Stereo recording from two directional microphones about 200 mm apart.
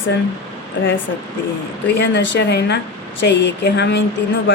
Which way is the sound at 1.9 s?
60° left (ahead or behind).